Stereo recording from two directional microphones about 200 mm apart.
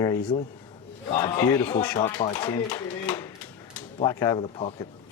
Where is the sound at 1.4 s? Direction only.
20° left (ahead or behind).